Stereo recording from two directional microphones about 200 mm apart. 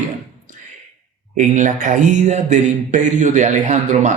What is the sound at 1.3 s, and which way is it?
Speech, 40° right (ahead or behind).